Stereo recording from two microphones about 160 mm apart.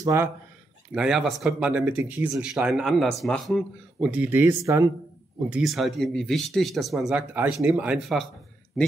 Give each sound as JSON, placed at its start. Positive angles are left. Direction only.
{"t": 0.0, "sound": "speech", "side_deg": -20}
{"t": 0.9, "sound": "speech", "side_deg": -5}
{"t": 5.5, "sound": "speech", "side_deg": 0}